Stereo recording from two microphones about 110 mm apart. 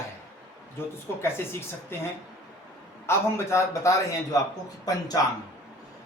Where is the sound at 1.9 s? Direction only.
20° left (ahead or behind).